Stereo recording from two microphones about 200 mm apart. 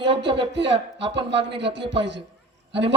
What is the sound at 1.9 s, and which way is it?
A man's voice, 60° right (ahead or behind).